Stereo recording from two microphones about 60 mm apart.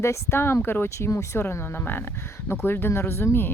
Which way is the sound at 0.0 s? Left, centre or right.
Left.